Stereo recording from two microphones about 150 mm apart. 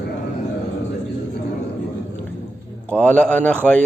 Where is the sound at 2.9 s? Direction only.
10° left (ahead or behind).